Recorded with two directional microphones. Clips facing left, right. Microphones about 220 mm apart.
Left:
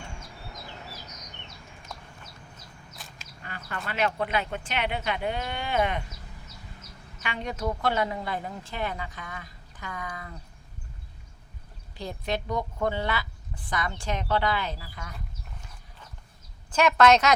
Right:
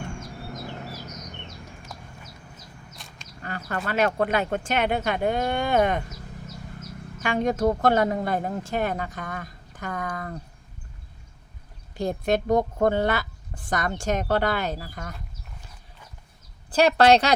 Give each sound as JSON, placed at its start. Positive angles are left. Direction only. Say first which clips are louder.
{"t": 2.9, "sound": "duck", "louder": "right 1 dB", "side_deg": 0}
{"t": 3.4, "sound": "a woman's voice", "louder": "right 7 dB", "side_deg": -45}
{"t": 7.2, "sound": "a woman's voice", "louder": "right 9 dB", "side_deg": -45}
{"t": 11.9, "sound": "a woman's voice", "louder": "right 8 dB", "side_deg": -45}
{"t": 16.7, "sound": "a woman's voice", "louder": "right 3 dB", "side_deg": -35}